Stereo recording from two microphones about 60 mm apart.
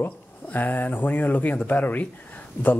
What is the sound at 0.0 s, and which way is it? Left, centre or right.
Speech, left.